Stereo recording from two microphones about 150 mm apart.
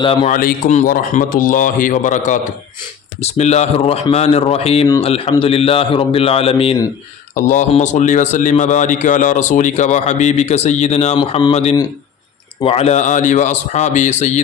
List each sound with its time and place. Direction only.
0.0 s a man's voice: 30° left (ahead or behind)
0.3 s speech: 65° left (ahead or behind)
3.2 s a man's voice: 45° left (ahead or behind)
7.3 s a man's voice: 55° left (ahead or behind)